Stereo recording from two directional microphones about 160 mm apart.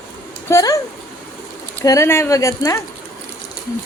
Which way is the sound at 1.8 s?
20° left (ahead or behind).